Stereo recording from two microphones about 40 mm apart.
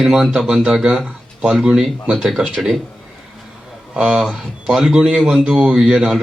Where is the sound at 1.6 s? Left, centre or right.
Centre.